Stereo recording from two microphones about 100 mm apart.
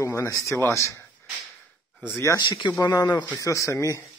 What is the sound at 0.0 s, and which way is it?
Speech, 30° left (ahead or behind).